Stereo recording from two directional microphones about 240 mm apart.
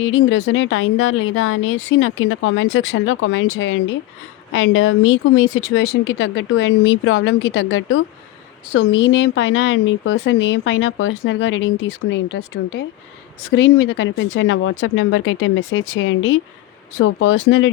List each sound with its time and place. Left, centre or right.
0.0 s speech: left